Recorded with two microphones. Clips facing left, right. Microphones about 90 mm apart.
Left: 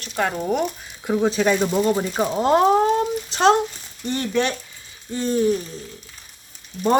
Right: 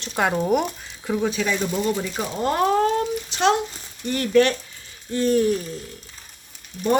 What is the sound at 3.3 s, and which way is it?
Speech, 35° left (ahead or behind).